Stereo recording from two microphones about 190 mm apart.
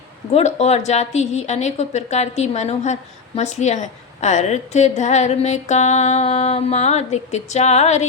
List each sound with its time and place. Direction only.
0.3 s a woman's voice: 35° left (ahead or behind)